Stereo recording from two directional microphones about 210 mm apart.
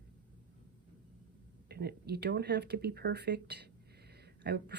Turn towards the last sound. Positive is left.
turn(degrees=-50)  # may be behind; listen again after turning